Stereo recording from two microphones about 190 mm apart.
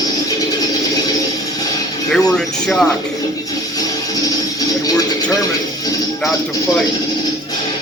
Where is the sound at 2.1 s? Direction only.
5° left (ahead or behind).